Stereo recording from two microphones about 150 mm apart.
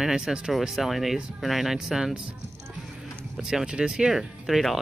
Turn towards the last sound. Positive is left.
turn(degrees=0)  # may be behind; listen again after turning